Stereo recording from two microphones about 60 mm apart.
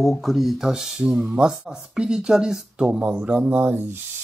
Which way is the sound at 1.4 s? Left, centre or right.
Centre.